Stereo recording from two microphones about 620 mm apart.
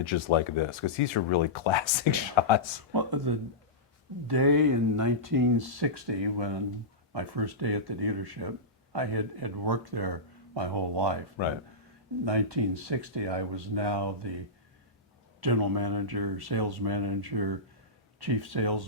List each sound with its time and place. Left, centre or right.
0.0 s speech: left
2.9 s speech: right
11.4 s speech: left
12.2 s speech: right
15.4 s speech: right